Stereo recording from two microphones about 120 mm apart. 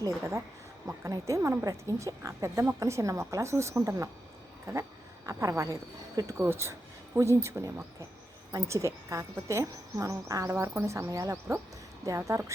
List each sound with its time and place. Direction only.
0.0 s a woman's voice: 25° right (ahead or behind)